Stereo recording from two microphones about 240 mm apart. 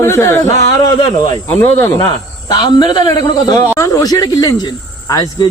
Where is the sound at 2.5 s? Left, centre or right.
Centre.